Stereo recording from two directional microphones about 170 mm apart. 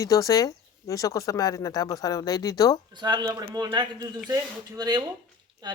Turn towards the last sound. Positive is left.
turn(degrees=-25)  # may be behind; listen again after turning